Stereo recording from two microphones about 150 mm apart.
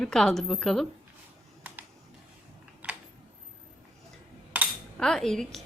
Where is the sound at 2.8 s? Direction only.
10° right (ahead or behind).